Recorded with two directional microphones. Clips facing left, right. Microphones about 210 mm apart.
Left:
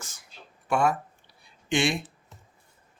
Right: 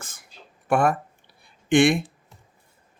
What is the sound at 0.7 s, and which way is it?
Speech, 55° right (ahead or behind).